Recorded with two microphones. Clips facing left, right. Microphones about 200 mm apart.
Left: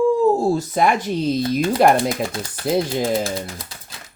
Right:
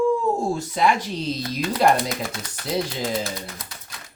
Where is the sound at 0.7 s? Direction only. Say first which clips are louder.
Left 3 dB; 50° left (ahead or behind).